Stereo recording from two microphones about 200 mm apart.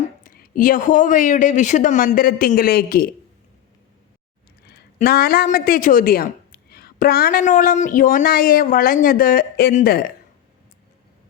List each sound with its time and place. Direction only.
0.2 s speech: 45° left (ahead or behind)
4.9 s speech: 50° left (ahead or behind)